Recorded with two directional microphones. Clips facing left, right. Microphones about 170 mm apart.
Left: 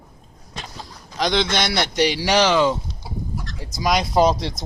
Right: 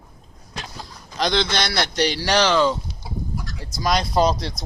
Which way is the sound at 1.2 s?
15° left (ahead or behind).